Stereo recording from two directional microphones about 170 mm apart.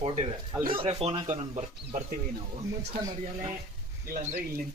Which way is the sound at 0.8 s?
35° right (ahead or behind).